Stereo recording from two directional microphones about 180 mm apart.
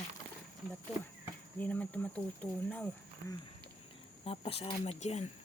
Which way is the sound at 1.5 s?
10° left (ahead or behind).